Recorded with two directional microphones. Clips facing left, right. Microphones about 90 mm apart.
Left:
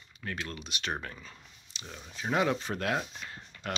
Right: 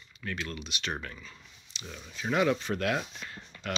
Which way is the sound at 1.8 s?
20° left (ahead or behind).